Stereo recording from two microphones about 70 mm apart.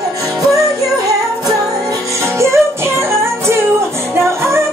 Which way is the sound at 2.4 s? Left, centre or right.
Right.